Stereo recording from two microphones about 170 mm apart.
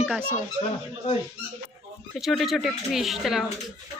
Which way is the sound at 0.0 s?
5° right (ahead or behind).